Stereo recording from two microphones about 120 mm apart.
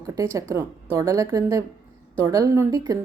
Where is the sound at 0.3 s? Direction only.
30° right (ahead or behind).